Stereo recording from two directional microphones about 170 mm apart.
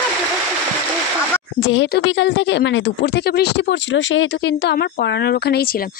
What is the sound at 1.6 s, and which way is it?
A woman's voice, 90° left.